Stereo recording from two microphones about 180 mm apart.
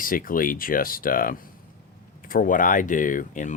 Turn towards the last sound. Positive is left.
turn(degrees=45)  # may be behind; listen again after turning